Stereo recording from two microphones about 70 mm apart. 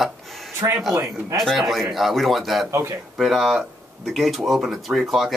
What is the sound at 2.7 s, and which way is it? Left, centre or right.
Speech, right.